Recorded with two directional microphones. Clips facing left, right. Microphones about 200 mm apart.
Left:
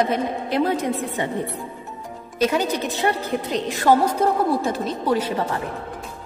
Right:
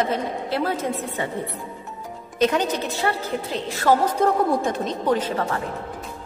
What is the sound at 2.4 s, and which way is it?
A woman's voice, 10° left (ahead or behind).